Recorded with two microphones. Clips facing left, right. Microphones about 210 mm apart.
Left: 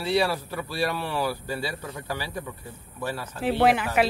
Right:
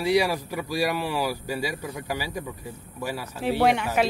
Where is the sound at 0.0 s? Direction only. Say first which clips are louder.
Right 2 dB; 15° right (ahead or behind).